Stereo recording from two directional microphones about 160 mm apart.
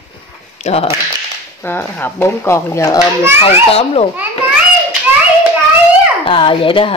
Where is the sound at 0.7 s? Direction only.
45° left (ahead or behind).